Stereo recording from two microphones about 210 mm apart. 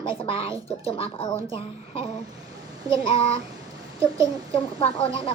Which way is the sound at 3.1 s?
25° left (ahead or behind).